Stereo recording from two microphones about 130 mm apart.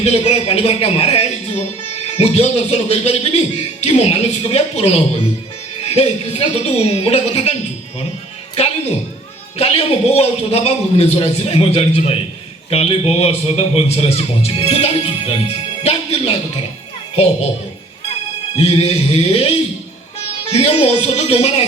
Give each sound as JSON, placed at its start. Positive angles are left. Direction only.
{"t": 0.0, "sound": "speech", "side_deg": 55}
{"t": 9.6, "sound": "speech", "side_deg": 50}
{"t": 18.5, "sound": "speech", "side_deg": 50}